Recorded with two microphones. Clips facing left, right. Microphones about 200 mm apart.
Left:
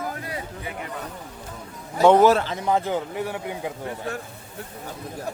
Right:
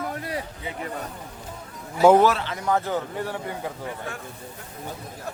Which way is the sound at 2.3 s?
45° left (ahead or behind).